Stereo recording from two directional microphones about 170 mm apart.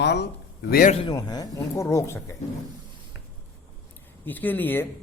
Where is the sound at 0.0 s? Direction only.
85° left.